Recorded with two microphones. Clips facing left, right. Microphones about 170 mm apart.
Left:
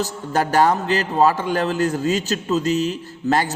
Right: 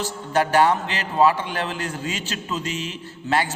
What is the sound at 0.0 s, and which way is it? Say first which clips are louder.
A man's voice: left 1 dB; 40° left (ahead or behind).